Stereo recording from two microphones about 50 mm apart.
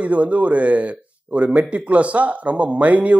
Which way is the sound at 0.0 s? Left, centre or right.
Right.